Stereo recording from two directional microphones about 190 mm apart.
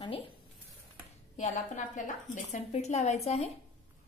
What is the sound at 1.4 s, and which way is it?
A woman's voice, 40° left (ahead or behind).